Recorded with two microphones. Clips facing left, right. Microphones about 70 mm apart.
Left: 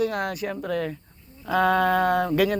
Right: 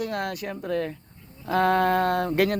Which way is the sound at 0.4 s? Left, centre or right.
Left.